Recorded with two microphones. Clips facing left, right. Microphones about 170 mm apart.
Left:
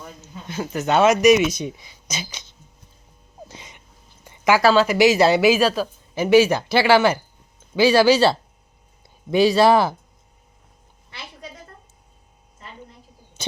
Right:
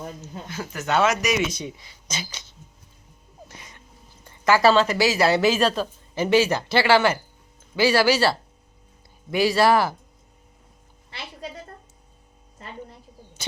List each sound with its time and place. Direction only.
0.4 s speech: 20° left (ahead or behind)
3.5 s a sound: 20° left (ahead or behind)
4.6 s speech: 5° left (ahead or behind)
4.9 s speech: 20° left (ahead or behind)